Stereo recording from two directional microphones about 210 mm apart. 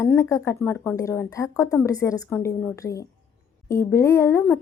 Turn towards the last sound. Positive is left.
turn(degrees=10)  # may be behind; listen again after turning